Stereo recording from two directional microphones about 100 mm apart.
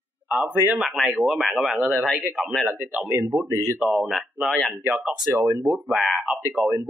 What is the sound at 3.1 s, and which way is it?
Speech, 30° right (ahead or behind).